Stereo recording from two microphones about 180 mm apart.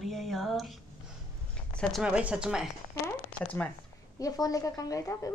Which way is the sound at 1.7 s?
5° left (ahead or behind).